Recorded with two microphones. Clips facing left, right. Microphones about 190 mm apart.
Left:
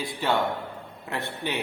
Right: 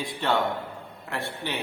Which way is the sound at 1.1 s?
20° left (ahead or behind).